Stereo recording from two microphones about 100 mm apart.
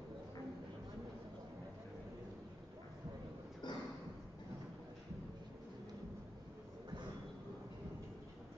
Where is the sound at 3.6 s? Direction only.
50° left (ahead or behind).